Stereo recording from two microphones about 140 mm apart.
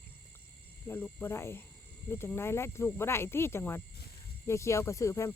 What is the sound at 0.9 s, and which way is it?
Speech, 15° left (ahead or behind).